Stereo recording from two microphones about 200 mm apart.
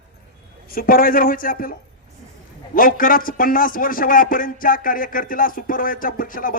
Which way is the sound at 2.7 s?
45° left (ahead or behind).